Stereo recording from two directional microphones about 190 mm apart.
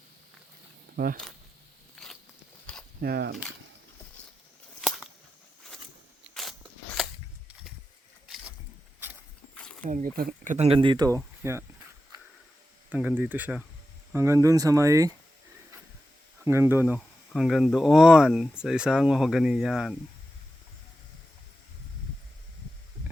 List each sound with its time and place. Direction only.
0.9 s speech: 50° right (ahead or behind)
2.0 s biting: 5° left (ahead or behind)
3.0 s speech: 55° right (ahead or behind)
4.8 s a sound: centre (ahead or behind)
6.3 s a sound: centre (ahead or behind)
9.8 s speech: 45° right (ahead or behind); by 11.6 s 15° right (ahead or behind)
12.9 s speech: 5° right (ahead or behind)
16.4 s speech: 15° right (ahead or behind)
16.8 s speech: 5° left (ahead or behind)